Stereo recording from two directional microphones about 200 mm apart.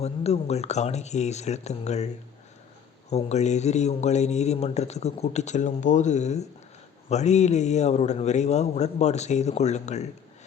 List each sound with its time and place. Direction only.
0.0 s a man's voice: 30° left (ahead or behind)
3.1 s a man's voice: 35° left (ahead or behind)